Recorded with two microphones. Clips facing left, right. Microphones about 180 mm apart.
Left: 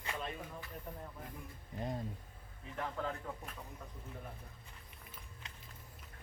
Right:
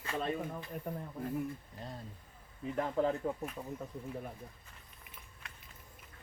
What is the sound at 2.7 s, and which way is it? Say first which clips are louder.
Speech: right 8 dB; 30° right (ahead or behind).